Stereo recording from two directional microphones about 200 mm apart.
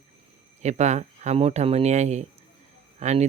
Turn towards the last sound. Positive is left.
turn(degrees=-35)  # may be behind; listen again after turning